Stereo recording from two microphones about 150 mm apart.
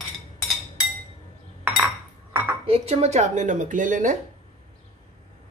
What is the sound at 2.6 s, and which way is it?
A woman's voice, 40° right (ahead or behind).